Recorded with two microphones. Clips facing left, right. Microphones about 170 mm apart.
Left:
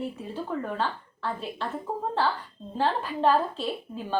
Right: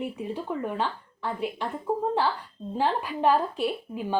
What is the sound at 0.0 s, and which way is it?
A woman's voice, 15° right (ahead or behind).